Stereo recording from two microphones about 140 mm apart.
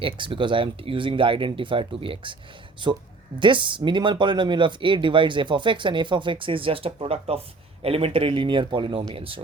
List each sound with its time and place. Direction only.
0.0 s speech: 35° right (ahead or behind)